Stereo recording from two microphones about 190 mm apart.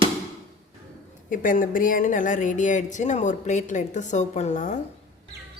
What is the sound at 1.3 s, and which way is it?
Speech, 45° left (ahead or behind).